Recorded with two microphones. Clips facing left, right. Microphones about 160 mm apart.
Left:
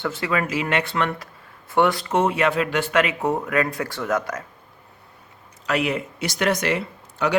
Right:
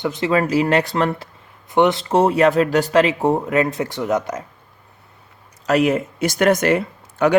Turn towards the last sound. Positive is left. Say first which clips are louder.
# right 6 dB
turn(degrees=-50)  # may be behind; listen again after turning